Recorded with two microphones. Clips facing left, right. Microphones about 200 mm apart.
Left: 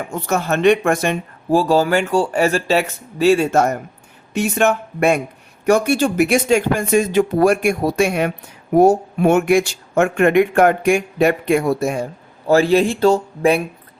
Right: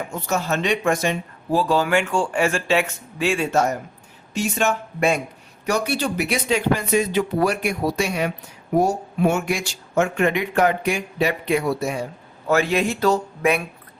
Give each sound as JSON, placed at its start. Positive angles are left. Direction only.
{"t": 0.1, "sound": "speech", "side_deg": 55}
{"t": 12.5, "sound": "speech", "side_deg": 30}